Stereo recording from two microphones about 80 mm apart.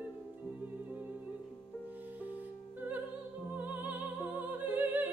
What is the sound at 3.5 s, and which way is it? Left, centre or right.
Music, right.